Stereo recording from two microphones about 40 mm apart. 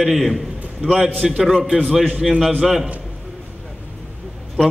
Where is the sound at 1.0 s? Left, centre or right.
Centre.